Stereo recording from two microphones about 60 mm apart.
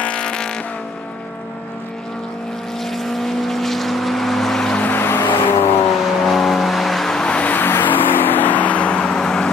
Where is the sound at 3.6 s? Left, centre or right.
Centre.